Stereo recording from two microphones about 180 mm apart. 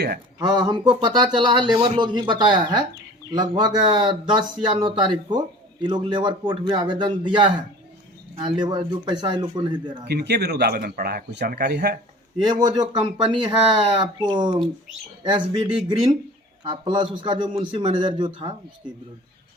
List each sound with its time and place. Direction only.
0.3 s speech: 20° right (ahead or behind)
10.1 s speech: 65° right (ahead or behind)
12.5 s speech: 20° right (ahead or behind)
13.9 s speech: 25° right (ahead or behind)